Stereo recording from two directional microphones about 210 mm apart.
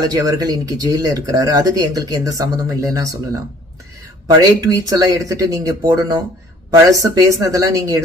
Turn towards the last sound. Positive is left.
turn(degrees=-15)  # may be behind; listen again after turning